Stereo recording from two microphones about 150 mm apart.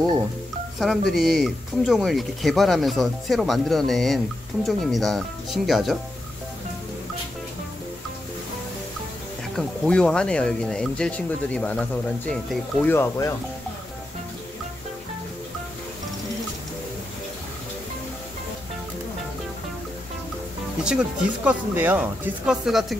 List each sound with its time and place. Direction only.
0.7 s speech: centre (ahead or behind)
9.6 s speech: 5° left (ahead or behind)
12.8 s speech: 15° left (ahead or behind)
20.8 s speech: 5° right (ahead or behind)